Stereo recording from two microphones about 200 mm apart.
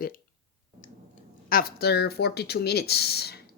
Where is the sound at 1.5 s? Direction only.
50° left (ahead or behind).